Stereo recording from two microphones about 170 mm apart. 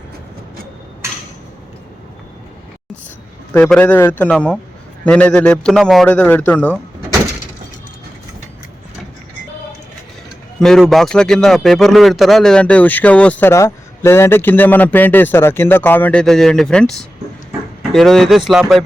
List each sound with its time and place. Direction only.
3.5 s a man's voice: 10° left (ahead or behind)
10.6 s a man's voice: 5° left (ahead or behind)